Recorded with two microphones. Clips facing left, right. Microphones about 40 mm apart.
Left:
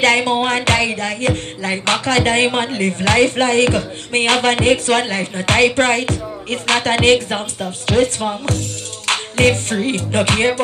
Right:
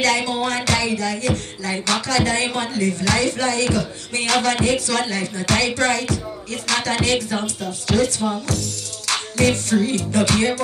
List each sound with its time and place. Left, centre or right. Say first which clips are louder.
0.0 s music: left 5 dB; left